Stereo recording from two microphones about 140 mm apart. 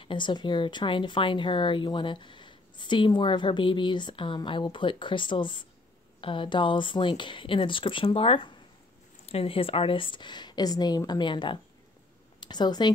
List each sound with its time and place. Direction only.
0.0 s a woman's voice: 35° left (ahead or behind)